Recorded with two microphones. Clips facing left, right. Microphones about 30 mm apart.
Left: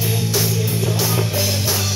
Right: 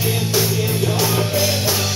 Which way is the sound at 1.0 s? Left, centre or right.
Centre.